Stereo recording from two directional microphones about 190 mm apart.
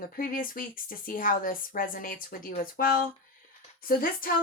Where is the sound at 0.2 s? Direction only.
45° left (ahead or behind).